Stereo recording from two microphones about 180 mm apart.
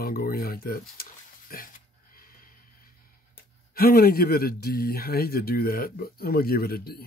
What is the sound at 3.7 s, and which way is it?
Speech, 55° left (ahead or behind).